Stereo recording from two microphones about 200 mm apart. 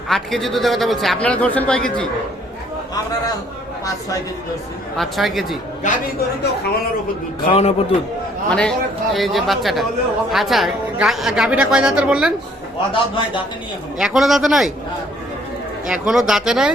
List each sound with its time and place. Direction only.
0.1 s a woman's voice: centre (ahead or behind)
4.9 s a woman's voice: centre (ahead or behind)
5.8 s a man's voice: 40° left (ahead or behind)
7.4 s a man's voice: 30° left (ahead or behind)
8.4 s a woman's voice: 5° left (ahead or behind)
12.9 s a man's voice: 25° left (ahead or behind)
14.0 s a woman's voice: centre (ahead or behind)
15.9 s a woman's voice: 5° right (ahead or behind)